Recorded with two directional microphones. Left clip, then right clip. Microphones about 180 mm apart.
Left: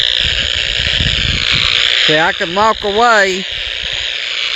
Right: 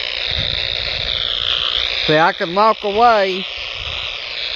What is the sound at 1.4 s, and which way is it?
Frog, 55° left (ahead or behind).